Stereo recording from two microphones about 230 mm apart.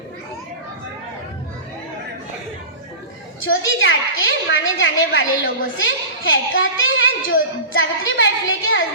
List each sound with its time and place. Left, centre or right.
3.4 s a woman's voice: left